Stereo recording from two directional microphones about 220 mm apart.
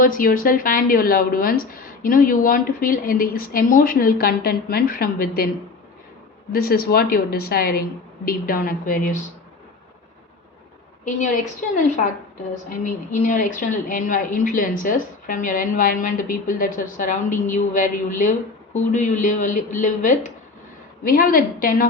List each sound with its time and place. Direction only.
0.0 s a woman's voice: 40° left (ahead or behind)
6.5 s a woman's voice: 40° left (ahead or behind)
13.1 s a woman's voice: 35° left (ahead or behind)